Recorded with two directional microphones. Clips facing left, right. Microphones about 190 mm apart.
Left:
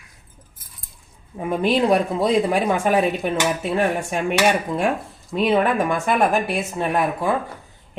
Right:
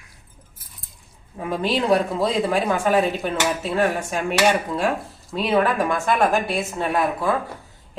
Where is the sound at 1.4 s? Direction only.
20° left (ahead or behind).